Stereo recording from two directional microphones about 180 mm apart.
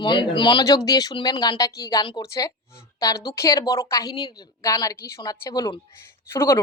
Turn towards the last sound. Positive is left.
turn(degrees=15)  # may be behind; listen again after turning